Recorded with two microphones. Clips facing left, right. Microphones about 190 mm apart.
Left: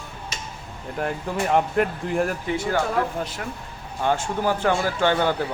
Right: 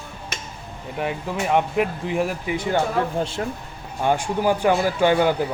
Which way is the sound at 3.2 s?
25° right (ahead or behind).